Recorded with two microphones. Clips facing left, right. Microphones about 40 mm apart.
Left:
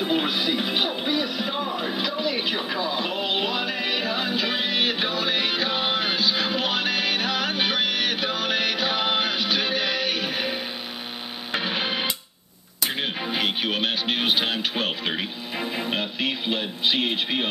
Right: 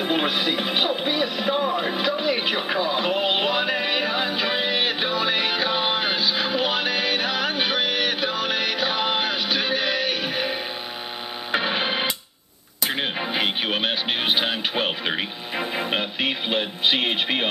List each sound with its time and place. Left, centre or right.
0.0 s music: right; by 10.6 s centre
11.5 s printer: centre
12.8 s music: centre; by 17.5 s right